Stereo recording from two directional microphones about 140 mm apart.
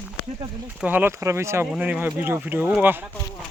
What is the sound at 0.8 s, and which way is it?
Speech, 15° right (ahead or behind).